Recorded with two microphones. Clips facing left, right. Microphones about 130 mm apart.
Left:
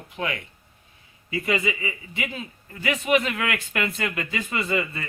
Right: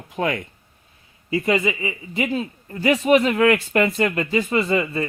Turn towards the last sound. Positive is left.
turn(degrees=-35)  # may be behind; listen again after turning